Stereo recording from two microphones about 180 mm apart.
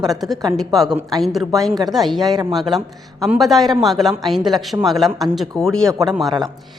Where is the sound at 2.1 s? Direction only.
20° right (ahead or behind).